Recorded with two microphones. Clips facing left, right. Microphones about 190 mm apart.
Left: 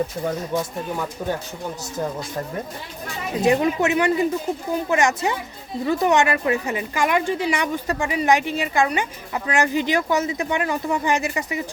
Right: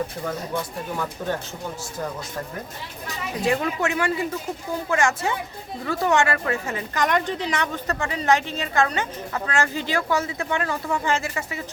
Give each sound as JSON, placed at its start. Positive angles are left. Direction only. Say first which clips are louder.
{"t": 3.3, "sound": "a woman's voice", "louder": "left 5 dB", "side_deg": 20}